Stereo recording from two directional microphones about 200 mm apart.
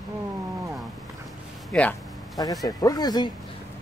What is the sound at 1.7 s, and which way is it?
Speech, 5° left (ahead or behind).